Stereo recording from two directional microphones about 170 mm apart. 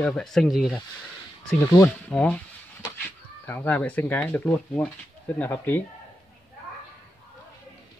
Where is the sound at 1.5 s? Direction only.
20° left (ahead or behind).